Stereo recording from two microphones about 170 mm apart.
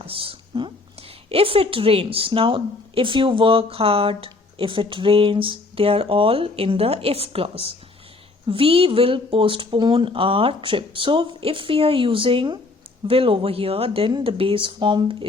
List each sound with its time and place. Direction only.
0.0 s a woman's voice: 30° right (ahead or behind)